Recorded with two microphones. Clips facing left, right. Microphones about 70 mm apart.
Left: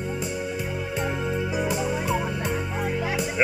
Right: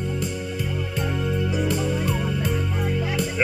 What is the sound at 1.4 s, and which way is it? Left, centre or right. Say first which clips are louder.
Music: right 2 dB; centre.